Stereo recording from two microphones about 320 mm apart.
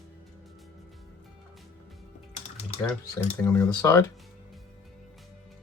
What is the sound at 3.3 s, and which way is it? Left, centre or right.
Speech, centre.